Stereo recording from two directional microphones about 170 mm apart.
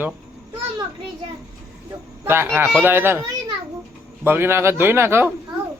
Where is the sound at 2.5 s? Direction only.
10° right (ahead or behind).